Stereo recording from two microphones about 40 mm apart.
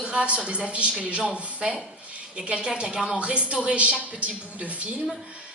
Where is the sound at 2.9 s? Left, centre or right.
Centre.